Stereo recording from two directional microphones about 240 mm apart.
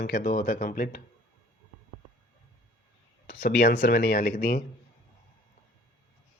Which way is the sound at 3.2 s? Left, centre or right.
Left.